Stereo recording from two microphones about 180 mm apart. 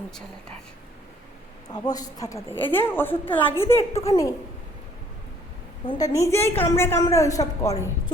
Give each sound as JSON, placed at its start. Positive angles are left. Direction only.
{"t": 1.6, "sound": "a woman's voice", "side_deg": 20}
{"t": 5.8, "sound": "a woman's voice", "side_deg": 20}